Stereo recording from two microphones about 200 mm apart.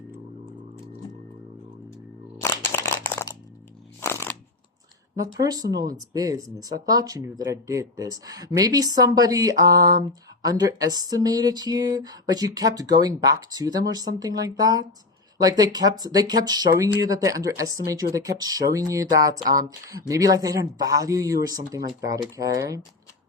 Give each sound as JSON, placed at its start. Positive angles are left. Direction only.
{"t": 2.4, "sound": "crunch", "side_deg": 15}
{"t": 4.0, "sound": "a sound", "side_deg": 10}
{"t": 5.1, "sound": "speech", "side_deg": -15}